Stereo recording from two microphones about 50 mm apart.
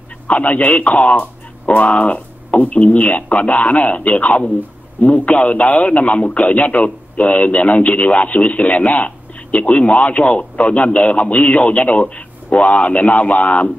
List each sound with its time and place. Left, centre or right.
0.3 s a man's voice: left